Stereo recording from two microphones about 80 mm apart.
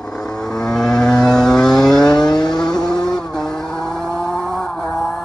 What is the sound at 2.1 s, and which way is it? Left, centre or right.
Vehicle, left.